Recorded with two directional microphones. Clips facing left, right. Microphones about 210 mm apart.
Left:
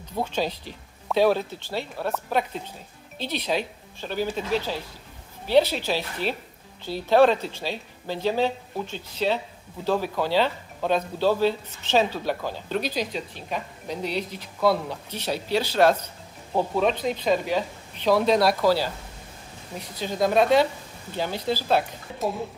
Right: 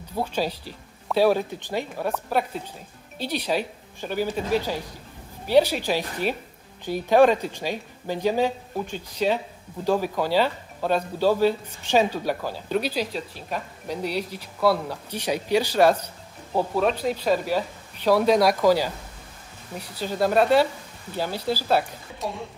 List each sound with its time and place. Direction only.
0.1 s a woman's voice: 10° right (ahead or behind)